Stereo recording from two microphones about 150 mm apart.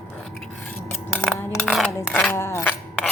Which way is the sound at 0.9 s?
5° left (ahead or behind).